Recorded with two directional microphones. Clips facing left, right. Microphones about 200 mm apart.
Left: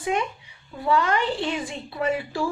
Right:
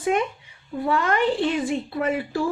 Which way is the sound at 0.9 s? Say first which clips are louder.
Right 1 dB; 50° right (ahead or behind).